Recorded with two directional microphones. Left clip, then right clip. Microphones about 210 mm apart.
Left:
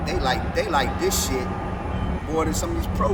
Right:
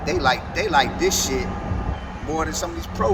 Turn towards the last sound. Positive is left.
turn(degrees=-5)  # may be behind; listen again after turning